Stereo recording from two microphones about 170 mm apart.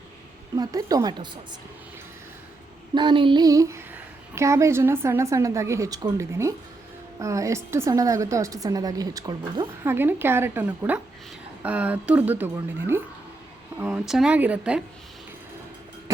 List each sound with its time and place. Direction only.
0.5 s a woman's voice: 20° right (ahead or behind)
2.9 s a woman's voice: 25° right (ahead or behind); by 14.8 s 5° right (ahead or behind)